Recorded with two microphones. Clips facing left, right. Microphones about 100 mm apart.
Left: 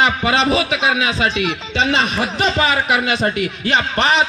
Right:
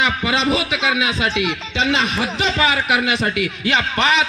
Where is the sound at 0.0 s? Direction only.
35° left (ahead or behind).